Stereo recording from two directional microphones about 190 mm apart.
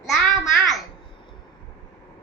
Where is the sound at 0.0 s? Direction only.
Centre (ahead or behind).